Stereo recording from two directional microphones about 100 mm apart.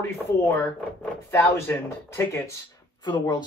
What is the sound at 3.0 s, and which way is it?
Speech, 45° left (ahead or behind).